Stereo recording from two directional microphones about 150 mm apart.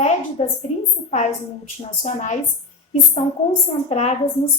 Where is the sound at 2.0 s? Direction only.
50° left (ahead or behind).